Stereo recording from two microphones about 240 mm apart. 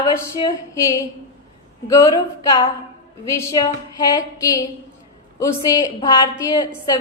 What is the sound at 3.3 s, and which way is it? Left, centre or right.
A woman's voice, centre.